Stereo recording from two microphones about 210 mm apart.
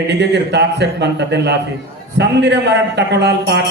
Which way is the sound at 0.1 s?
55° right (ahead or behind).